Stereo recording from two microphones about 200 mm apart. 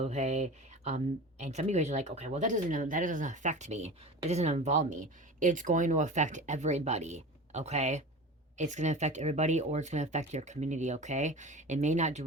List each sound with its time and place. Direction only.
0.0 s speech: 35° right (ahead or behind)